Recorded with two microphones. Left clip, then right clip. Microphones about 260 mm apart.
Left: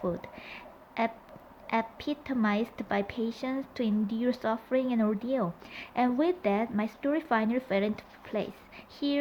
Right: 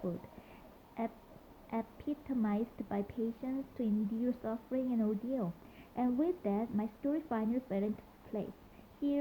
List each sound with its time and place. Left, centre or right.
0.4 s a sound: centre
1.6 s a woman's voice: centre
9.0 s a woman's voice: centre